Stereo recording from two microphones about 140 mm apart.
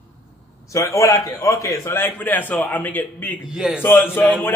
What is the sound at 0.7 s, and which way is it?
A man's voice, 20° left (ahead or behind).